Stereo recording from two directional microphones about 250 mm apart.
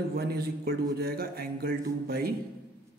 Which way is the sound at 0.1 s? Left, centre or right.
Right.